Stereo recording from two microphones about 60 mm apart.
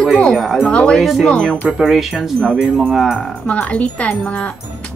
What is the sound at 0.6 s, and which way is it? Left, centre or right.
Speech, centre.